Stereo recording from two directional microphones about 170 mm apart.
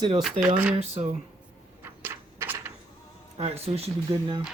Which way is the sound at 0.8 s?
40° right (ahead or behind).